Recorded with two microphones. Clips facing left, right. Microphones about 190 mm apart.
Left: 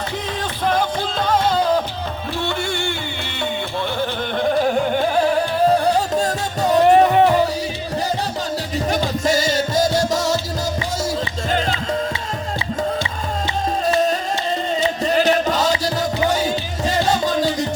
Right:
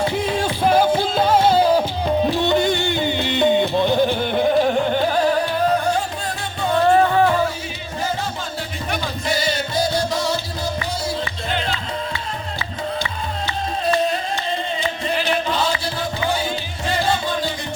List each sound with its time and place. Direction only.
0.6 s music: 10° right (ahead or behind)
5.7 s music: 40° left (ahead or behind)
6.8 s music: 20° left (ahead or behind)
8.9 s music: 45° left (ahead or behind)
15.0 s music: 40° left (ahead or behind)
16.9 s music: 40° left (ahead or behind)